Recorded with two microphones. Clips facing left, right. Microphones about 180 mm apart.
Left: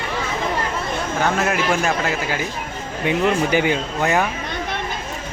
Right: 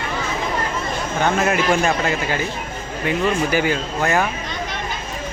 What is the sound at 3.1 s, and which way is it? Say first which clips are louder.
Speech: left 1 dB; 20° left (ahead or behind).